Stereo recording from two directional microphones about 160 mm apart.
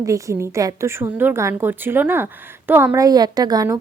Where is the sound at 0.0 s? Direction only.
20° right (ahead or behind).